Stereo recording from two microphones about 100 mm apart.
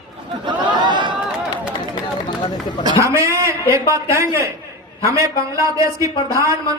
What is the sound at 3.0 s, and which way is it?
A man's voice, 30° right (ahead or behind).